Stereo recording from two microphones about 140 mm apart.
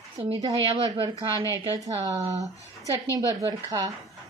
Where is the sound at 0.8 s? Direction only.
25° right (ahead or behind).